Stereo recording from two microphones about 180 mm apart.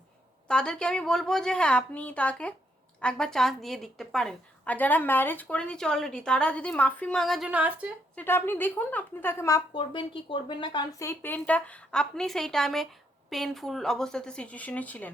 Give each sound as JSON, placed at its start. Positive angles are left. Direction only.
{"t": 0.4, "sound": "a woman's voice", "side_deg": 5}
{"t": 8.1, "sound": "a woman's voice", "side_deg": 10}
{"t": 9.7, "sound": "speech", "side_deg": 30}
{"t": 11.1, "sound": "a woman's voice", "side_deg": 10}